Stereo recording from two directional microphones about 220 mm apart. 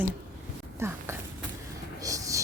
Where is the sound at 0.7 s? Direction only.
10° right (ahead or behind).